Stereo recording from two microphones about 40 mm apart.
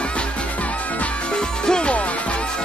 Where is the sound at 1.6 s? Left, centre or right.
Left.